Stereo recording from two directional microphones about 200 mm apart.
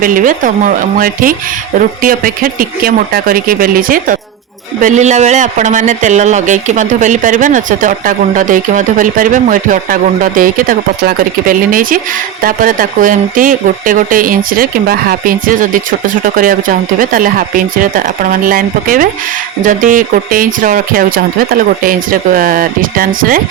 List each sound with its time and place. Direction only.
0.0 s speech: 45° right (ahead or behind)